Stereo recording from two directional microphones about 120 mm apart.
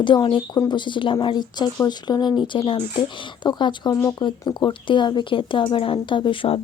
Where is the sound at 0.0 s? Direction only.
40° left (ahead or behind).